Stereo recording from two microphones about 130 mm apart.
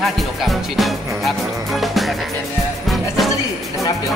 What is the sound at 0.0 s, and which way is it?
Speech, centre (ahead or behind).